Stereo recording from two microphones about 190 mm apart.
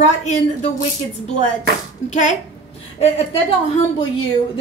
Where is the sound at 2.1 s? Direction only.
40° left (ahead or behind).